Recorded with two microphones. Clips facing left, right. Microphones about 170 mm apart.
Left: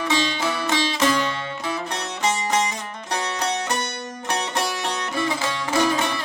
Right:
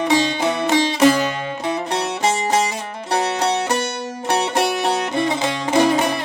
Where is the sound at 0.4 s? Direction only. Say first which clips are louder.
Right 6 dB; 20° right (ahead or behind).